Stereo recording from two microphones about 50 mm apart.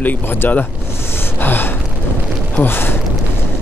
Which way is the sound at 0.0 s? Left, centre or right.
Left.